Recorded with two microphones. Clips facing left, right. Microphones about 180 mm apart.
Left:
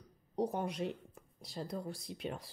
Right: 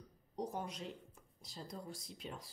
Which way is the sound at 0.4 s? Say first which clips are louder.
Left 7 dB; 65° left (ahead or behind).